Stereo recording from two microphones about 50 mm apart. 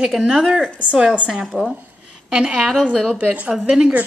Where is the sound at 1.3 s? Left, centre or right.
Centre.